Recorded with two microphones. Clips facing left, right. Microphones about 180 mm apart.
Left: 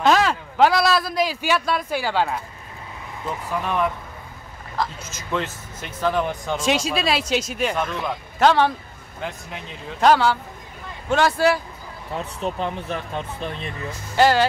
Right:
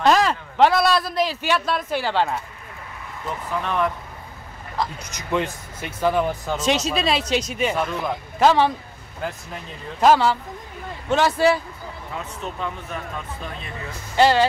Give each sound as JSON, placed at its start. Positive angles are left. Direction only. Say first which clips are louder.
{"t": 0.0, "sound": "a man's voice", "louder": "even", "side_deg": 0}
{"t": 3.6, "sound": "a man's voice", "louder": "even", "side_deg": 5}
{"t": 4.9, "sound": "speech", "louder": "right 2 dB", "side_deg": -15}
{"t": 6.6, "sound": "a man's voice", "louder": "even", "side_deg": 5}
{"t": 12.5, "sound": "speech", "louder": "left 3 dB", "side_deg": 30}
{"t": 14.1, "sound": "speech", "louder": "even", "side_deg": 0}